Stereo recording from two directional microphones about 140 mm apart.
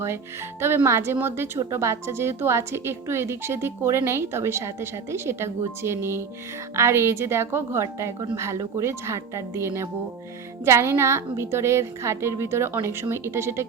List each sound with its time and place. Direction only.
0.6 s a woman's voice: 15° right (ahead or behind)